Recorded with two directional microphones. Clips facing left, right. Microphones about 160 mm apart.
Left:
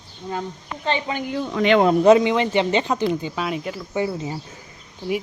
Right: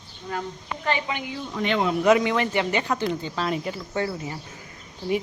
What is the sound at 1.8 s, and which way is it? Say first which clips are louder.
Speech: left 7 dB; 45° left (ahead or behind).